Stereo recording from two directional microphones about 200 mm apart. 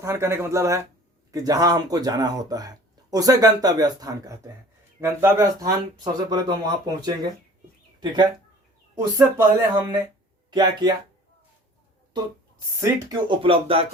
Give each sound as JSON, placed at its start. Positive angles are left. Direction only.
{"t": 0.0, "sound": "speech", "side_deg": -15}
{"t": 9.0, "sound": "speech", "side_deg": -15}
{"t": 12.8, "sound": "speech", "side_deg": -20}